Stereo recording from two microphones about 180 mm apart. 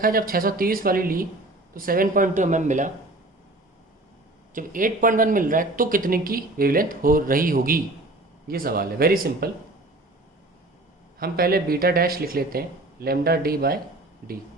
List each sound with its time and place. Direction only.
0.0 s speech: 55° right (ahead or behind)
4.5 s speech: 50° right (ahead or behind)
11.2 s speech: 55° right (ahead or behind)